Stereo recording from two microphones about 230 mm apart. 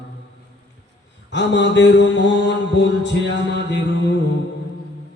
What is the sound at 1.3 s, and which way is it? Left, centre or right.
Mantra, left.